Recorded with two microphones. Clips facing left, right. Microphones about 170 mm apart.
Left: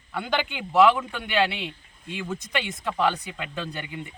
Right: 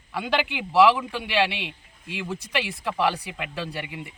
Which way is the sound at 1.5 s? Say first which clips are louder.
Left 1 dB; 85° right.